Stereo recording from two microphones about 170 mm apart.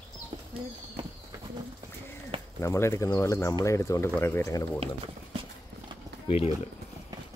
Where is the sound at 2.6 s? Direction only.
15° left (ahead or behind).